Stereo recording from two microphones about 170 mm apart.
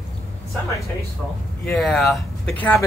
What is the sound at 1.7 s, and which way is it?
Speech, centre (ahead or behind).